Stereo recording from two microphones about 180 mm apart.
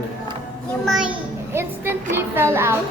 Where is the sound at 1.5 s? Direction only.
10° right (ahead or behind).